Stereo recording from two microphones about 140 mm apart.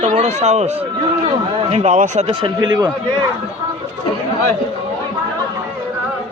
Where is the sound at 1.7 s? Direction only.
55° right (ahead or behind).